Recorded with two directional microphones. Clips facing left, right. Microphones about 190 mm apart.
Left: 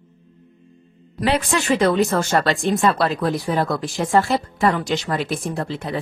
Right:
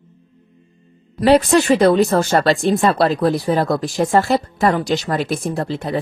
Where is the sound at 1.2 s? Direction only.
40° right (ahead or behind).